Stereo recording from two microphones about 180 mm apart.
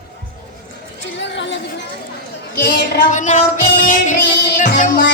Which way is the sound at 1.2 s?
80° left.